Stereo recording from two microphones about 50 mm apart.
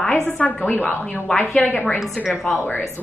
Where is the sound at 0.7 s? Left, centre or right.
Left.